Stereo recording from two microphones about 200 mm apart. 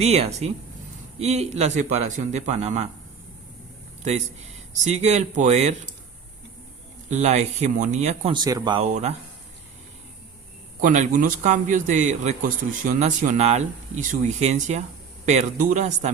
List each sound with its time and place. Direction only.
0.0 s a man's voice: 30° right (ahead or behind)
4.7 s a man's voice: 35° right (ahead or behind)
7.1 s a man's voice: 35° right (ahead or behind)
8.3 s speech: 20° right (ahead or behind)
8.9 s a man's voice: 35° right (ahead or behind)
10.8 s a man's voice: 40° right (ahead or behind)